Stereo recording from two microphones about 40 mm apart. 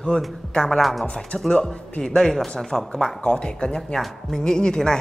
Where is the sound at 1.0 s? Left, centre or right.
Centre.